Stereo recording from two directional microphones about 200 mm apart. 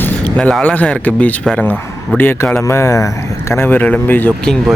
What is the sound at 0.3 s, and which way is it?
Speech, 5° left (ahead or behind).